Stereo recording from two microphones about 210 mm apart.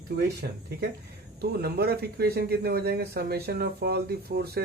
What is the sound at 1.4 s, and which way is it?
Speech, 50° right (ahead or behind).